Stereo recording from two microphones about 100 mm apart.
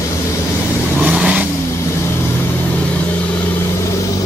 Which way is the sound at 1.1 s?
15° right (ahead or behind).